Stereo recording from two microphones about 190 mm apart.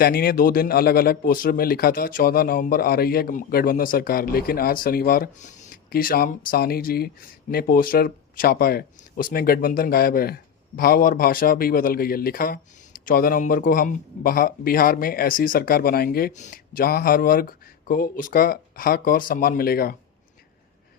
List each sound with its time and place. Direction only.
0.0 s speech: 55° left (ahead or behind)